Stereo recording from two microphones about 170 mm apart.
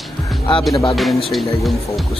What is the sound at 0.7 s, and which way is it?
Speech, 20° left (ahead or behind).